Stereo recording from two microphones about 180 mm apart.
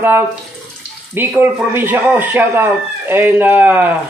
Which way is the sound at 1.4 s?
10° right (ahead or behind).